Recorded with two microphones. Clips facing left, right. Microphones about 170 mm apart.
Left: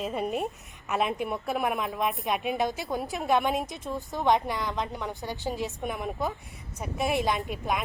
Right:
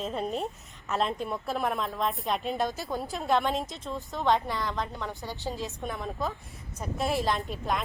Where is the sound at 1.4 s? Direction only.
Centre (ahead or behind).